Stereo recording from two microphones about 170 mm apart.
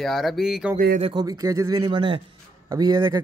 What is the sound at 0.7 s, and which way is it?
Speech, 55° right (ahead or behind).